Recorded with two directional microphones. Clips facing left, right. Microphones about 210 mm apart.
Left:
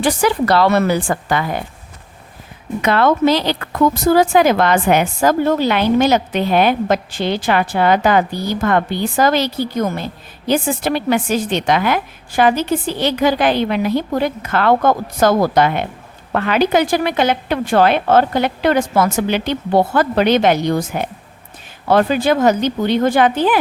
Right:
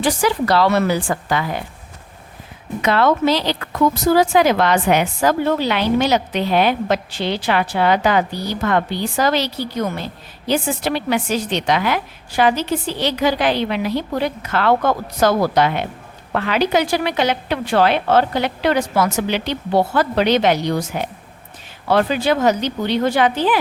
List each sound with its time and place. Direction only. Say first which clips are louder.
0.0 s a woman's voice: left 2 dB; 55° left (ahead or behind)
2.8 s a woman's voice: left 2 dB; 55° left (ahead or behind)